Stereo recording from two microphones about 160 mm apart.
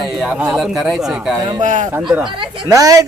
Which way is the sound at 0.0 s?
Centre (ahead or behind).